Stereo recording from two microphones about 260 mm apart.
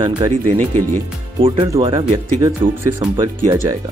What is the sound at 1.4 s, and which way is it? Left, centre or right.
Speech, right.